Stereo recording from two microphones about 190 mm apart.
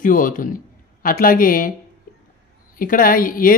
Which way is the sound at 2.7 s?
45° left (ahead or behind).